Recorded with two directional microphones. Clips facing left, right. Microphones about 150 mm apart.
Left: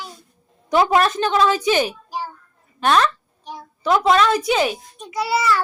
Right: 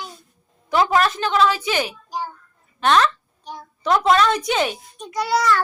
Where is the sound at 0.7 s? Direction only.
20° left (ahead or behind).